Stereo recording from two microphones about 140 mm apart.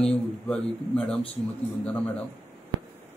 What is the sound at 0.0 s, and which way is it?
Speech, 5° left (ahead or behind).